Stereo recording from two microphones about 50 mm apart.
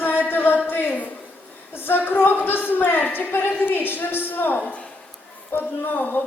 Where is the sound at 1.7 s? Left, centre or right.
Left.